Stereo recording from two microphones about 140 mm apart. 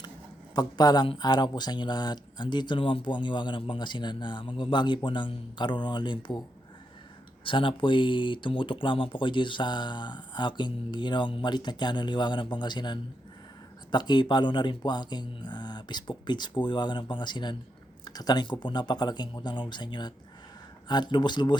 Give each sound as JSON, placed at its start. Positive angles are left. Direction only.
{"t": 0.5, "sound": "speech", "side_deg": 30}
{"t": 7.4, "sound": "speech", "side_deg": 40}